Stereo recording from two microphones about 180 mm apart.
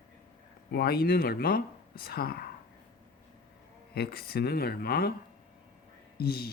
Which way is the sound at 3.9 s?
60° left (ahead or behind).